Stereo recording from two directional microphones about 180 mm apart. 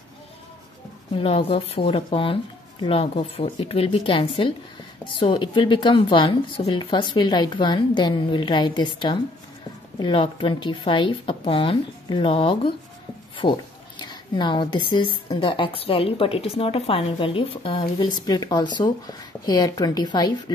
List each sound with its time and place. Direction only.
1.1 s a woman's voice: 30° left (ahead or behind)